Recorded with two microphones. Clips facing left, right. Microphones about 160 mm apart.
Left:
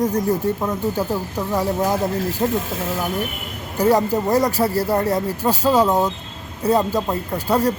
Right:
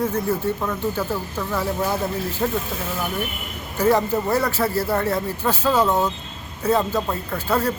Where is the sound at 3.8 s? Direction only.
10° left (ahead or behind).